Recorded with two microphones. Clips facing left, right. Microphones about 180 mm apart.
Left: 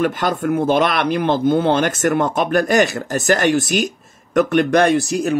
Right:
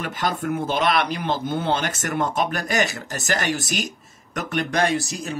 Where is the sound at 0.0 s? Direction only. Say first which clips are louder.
Left 7 dB; 55° left (ahead or behind).